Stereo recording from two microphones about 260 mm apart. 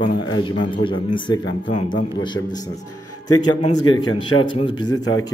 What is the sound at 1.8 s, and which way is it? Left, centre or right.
Speech, left.